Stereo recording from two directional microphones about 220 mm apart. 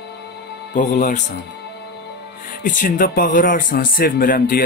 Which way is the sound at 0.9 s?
35° left (ahead or behind).